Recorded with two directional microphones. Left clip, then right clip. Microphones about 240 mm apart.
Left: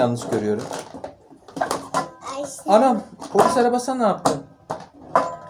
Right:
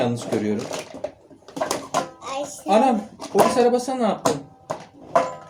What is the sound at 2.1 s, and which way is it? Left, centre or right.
Music, centre.